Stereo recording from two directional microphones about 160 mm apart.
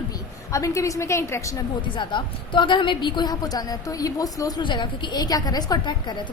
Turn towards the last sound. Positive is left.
turn(degrees=30)  # may be behind; listen again after turning